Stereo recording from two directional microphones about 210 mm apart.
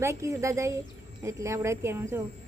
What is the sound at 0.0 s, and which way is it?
Speech, 15° right (ahead or behind).